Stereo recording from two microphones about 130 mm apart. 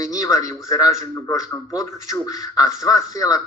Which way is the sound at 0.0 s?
25° left (ahead or behind).